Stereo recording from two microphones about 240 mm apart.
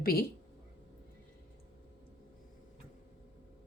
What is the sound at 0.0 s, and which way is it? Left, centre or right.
Speech, left.